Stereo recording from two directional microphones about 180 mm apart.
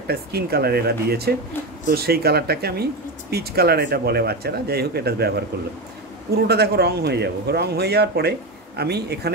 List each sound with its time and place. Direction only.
0.1 s speech: 60° right (ahead or behind)
6.4 s speech: 65° right (ahead or behind)